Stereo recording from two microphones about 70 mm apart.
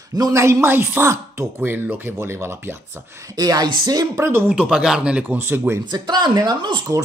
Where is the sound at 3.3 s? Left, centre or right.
Right.